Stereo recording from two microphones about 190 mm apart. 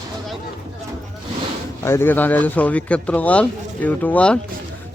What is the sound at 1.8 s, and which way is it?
Speech, 15° left (ahead or behind).